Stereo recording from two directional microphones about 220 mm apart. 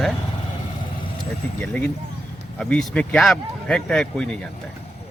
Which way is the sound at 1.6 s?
5° left (ahead or behind).